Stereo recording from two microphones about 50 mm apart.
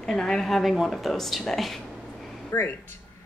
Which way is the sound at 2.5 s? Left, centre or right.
Left.